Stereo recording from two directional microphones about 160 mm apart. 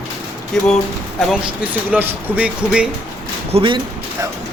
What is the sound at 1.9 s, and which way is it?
Speech, 10° right (ahead or behind).